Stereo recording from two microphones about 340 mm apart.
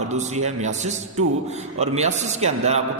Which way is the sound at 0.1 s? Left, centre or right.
Centre.